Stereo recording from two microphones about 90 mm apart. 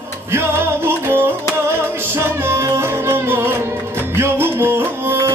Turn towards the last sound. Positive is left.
turn(degrees=-25)  # may be behind; listen again after turning